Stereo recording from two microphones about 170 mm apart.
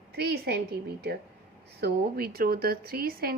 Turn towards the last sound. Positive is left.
turn(degrees=-60)  # may be behind; listen again after turning